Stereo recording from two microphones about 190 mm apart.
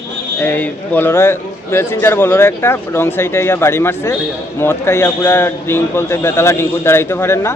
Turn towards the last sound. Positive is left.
turn(degrees=15)  # may be behind; listen again after turning